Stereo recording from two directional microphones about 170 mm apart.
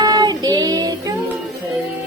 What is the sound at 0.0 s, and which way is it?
Child singing, 25° right (ahead or behind).